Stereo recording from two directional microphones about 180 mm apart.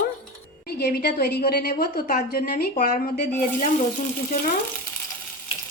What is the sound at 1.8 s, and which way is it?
A woman's voice, 50° left (ahead or behind).